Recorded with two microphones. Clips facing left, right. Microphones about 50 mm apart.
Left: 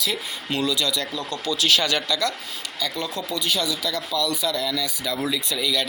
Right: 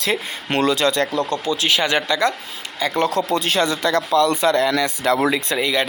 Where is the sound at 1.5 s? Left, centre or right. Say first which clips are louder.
Even; right.